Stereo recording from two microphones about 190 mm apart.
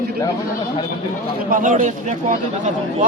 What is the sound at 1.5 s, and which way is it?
Speech, 45° right (ahead or behind).